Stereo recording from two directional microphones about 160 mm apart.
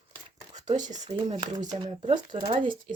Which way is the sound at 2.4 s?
35° right (ahead or behind).